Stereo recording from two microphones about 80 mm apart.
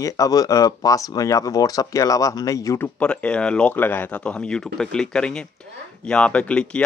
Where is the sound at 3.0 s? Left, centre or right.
Centre.